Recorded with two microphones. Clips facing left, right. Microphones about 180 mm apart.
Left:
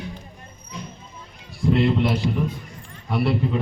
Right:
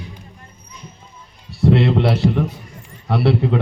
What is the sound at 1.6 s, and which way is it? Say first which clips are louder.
A man's voice: right 4 dB; 75° right (ahead or behind).